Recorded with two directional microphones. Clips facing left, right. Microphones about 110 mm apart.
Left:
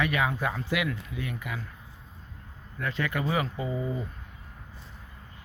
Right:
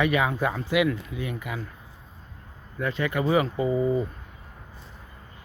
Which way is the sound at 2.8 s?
5° right (ahead or behind).